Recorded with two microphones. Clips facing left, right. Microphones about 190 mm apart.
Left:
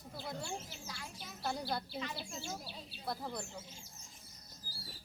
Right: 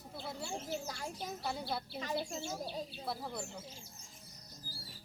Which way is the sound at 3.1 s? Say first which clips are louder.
Left 3 dB; 5° right (ahead or behind).